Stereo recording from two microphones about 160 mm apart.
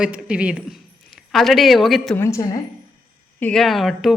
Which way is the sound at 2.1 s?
20° left (ahead or behind).